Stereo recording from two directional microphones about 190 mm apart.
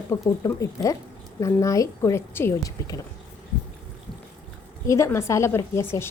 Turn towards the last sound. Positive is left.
turn(degrees=10)  # may be behind; listen again after turning